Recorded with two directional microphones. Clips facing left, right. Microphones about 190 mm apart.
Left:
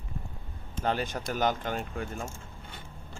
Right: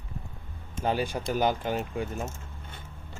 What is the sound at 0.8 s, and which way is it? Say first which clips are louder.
Speech: right 2 dB; 10° right (ahead or behind).